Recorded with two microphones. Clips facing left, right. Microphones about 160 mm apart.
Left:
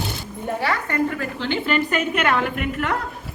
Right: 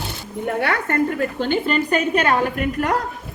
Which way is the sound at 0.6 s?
55° right (ahead or behind).